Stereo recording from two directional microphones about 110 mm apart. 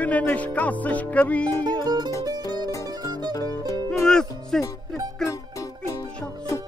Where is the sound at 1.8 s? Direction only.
40° right (ahead or behind).